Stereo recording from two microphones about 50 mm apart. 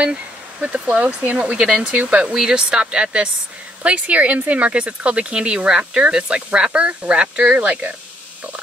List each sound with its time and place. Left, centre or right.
0.0 s speech: right
2.3 s speech: centre